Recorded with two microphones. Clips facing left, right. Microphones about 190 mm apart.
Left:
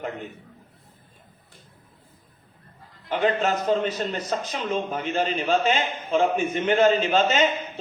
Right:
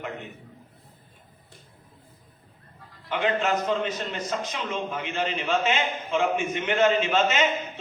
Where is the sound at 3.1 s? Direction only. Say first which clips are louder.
Left 2 dB; 35° left (ahead or behind).